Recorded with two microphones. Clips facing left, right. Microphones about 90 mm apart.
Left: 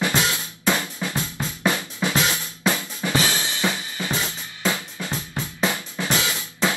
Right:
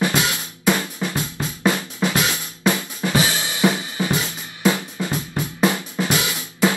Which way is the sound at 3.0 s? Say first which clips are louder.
Right 2 dB; 5° right (ahead or behind).